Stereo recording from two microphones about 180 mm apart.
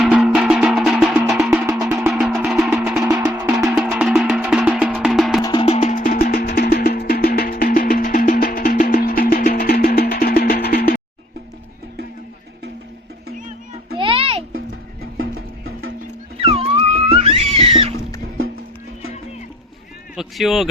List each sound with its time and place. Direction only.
0.0 s music: 5° right (ahead or behind)
3.0 s music: 20° right (ahead or behind)
3.8 s music: centre (ahead or behind)
5.4 s music: 25° left (ahead or behind); by 11.0 s 60° left (ahead or behind)
13.9 s a sound: 30° right (ahead or behind)
15.2 s music: 90° right
16.4 s music: 35° right (ahead or behind)
20.1 s a sound: centre (ahead or behind)